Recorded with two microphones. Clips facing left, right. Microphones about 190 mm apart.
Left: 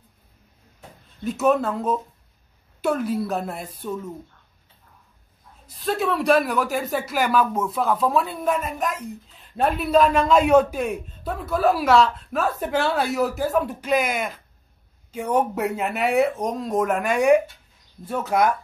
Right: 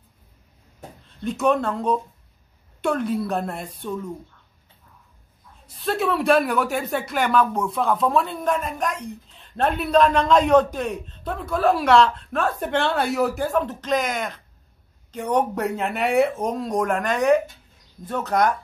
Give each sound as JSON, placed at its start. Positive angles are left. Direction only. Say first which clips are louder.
{"t": 1.2, "sound": "speech", "louder": "left 1 dB", "side_deg": 5}
{"t": 5.7, "sound": "speech", "louder": "even", "side_deg": 0}